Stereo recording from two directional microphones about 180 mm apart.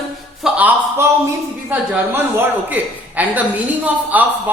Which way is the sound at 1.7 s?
10° right (ahead or behind).